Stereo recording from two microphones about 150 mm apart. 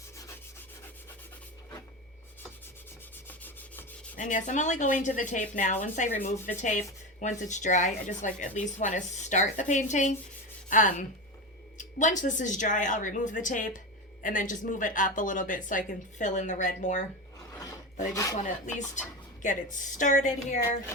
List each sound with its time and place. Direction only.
3.2 s rub: 10° left (ahead or behind)
4.1 s a woman's voice: 60° left (ahead or behind)
18.1 s speech: 20° left (ahead or behind)
18.3 s a woman's voice: 55° left (ahead or behind)